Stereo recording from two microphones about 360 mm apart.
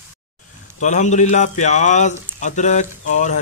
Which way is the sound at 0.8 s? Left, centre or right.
Centre.